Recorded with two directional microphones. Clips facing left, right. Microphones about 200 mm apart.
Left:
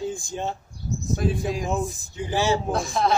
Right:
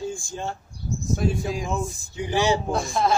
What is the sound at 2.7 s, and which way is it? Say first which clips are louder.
Speech: even; centre (ahead or behind).